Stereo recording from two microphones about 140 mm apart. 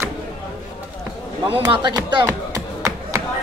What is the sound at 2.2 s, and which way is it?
Chop, 20° right (ahead or behind).